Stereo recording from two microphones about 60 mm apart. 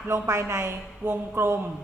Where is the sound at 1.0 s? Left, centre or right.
Right.